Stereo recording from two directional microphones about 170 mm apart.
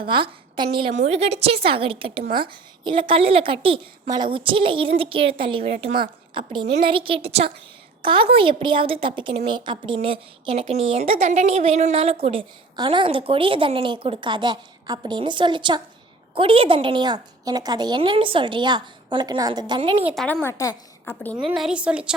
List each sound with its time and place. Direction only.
0.1 s a woman's voice: 30° right (ahead or behind)
0.9 s a woman's voice: 40° right (ahead or behind)
2.2 s a woman's voice: 60° right (ahead or behind)
2.8 s a woman's voice: 30° right (ahead or behind)
20.1 s a woman's voice: 10° left (ahead or behind)
21.3 s a woman's voice: 5° right (ahead or behind)